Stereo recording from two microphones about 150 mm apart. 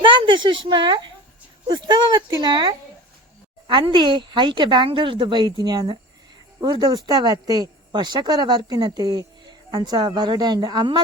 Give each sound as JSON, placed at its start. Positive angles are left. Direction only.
{"t": 0.0, "sound": "a woman's voice", "side_deg": -30}